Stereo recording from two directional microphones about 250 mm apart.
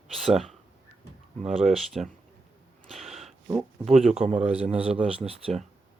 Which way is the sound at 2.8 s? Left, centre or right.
Centre.